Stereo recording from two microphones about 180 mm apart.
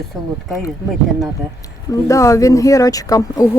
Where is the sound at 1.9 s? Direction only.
20° left (ahead or behind).